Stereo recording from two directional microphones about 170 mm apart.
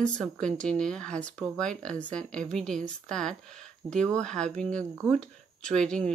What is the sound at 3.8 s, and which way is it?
Speech, 25° right (ahead or behind).